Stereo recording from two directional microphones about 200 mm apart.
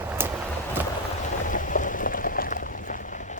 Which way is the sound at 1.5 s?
40° left (ahead or behind).